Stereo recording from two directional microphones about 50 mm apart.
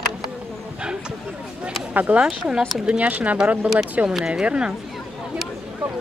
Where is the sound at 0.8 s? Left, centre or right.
Centre.